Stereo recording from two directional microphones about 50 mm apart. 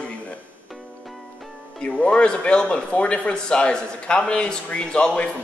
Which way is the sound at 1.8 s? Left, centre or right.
Left.